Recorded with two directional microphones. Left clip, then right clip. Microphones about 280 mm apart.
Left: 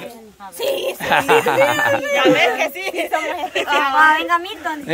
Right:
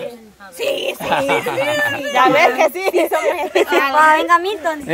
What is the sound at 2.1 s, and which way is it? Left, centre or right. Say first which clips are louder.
Speech: right 5 dB; centre.